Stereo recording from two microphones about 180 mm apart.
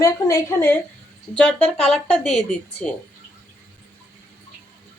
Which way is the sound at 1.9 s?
5° left (ahead or behind).